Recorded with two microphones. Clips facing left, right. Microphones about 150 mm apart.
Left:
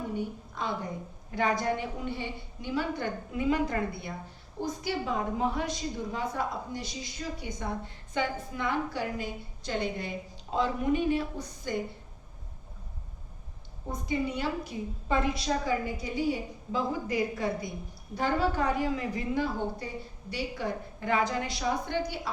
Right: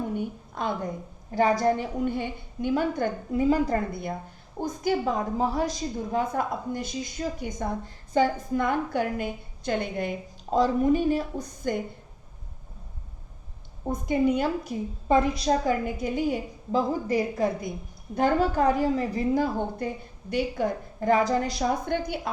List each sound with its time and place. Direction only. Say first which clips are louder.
0.2 s a sound: right 3 dB; 50° right (ahead or behind)
1.3 s a woman's voice: right 6 dB; 35° right (ahead or behind); by 10.1 s 55° right (ahead or behind)
10.5 s a woman's voice: right 6 dB; 40° right (ahead or behind)
14.1 s a woman's voice: right 7 dB; 50° right (ahead or behind)